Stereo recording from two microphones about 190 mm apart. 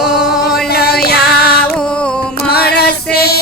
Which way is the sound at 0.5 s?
55° left (ahead or behind).